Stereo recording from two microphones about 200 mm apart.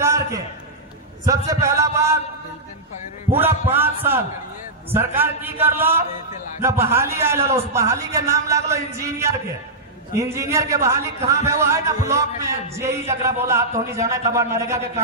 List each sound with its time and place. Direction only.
0.0 s a sound: 15° right (ahead or behind)
1.5 s a man's voice: 15° right (ahead or behind)
3.3 s a man's voice: 10° right (ahead or behind)